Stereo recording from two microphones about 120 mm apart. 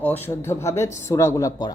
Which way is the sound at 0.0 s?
20° left (ahead or behind).